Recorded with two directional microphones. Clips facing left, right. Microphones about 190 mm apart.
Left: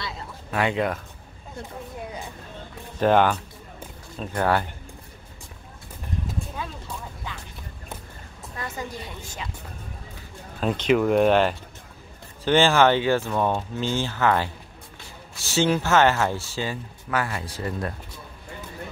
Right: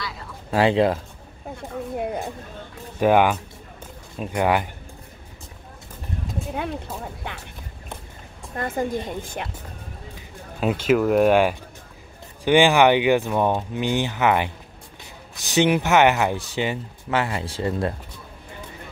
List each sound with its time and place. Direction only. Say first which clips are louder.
0.5 s speech: right 6 dB; 30° right (ahead or behind)
2.0 s a sound: right 10 dB; 55° right (ahead or behind)
3.0 s speech: right 2 dB; 10° right (ahead or behind)
6.5 s a sound: right 6 dB; 65° right (ahead or behind)
8.5 s speech: right 9 dB; 50° right (ahead or behind)
10.6 s speech: right 2 dB; 5° right (ahead or behind); by 17.9 s 25° right (ahead or behind)